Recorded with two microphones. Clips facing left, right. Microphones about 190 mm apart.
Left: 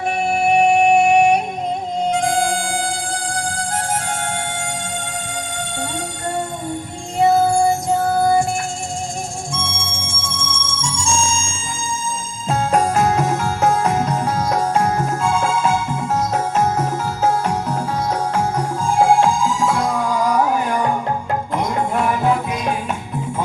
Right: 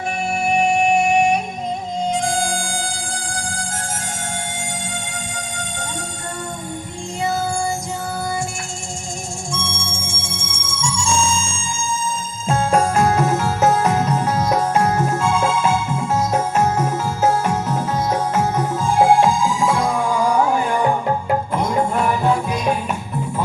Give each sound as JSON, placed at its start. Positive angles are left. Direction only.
{"t": 0.7, "sound": "music", "side_deg": 60}
{"t": 7.2, "sound": "music", "side_deg": 60}
{"t": 9.6, "sound": "music", "side_deg": 55}
{"t": 12.5, "sound": "music", "side_deg": 0}
{"t": 18.3, "sound": "music", "side_deg": -5}